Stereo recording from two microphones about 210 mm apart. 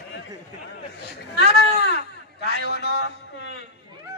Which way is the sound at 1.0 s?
55° left (ahead or behind).